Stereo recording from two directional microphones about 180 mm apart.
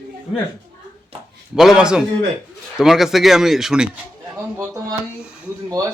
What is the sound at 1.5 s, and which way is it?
Speech, 5° right (ahead or behind).